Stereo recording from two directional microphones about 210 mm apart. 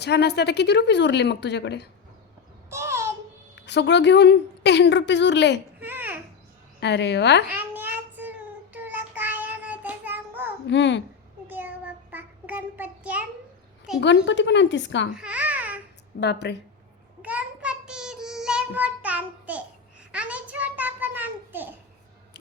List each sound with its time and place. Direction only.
0.0 s a woman's voice: 50° left (ahead or behind)
2.6 s babbling: 10° right (ahead or behind)
3.5 s a woman's voice: 55° left (ahead or behind)
5.8 s babbling: 10° right (ahead or behind)
6.7 s a woman's voice: 55° left (ahead or behind)
7.5 s child singing: 10° right (ahead or behind)
10.7 s a woman's voice: 60° left (ahead or behind)
11.4 s child singing: 10° right (ahead or behind)
14.0 s a woman's voice: 60° left (ahead or behind)
15.1 s babbling: 5° right (ahead or behind)
16.2 s speech: 55° left (ahead or behind)
17.2 s child singing: 5° right (ahead or behind)
20.1 s a sound: 5° right (ahead or behind)